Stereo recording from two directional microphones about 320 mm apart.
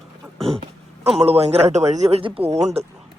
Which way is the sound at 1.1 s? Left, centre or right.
Centre.